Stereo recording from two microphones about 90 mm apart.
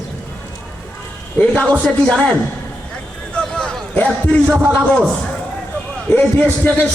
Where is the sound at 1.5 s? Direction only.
15° left (ahead or behind).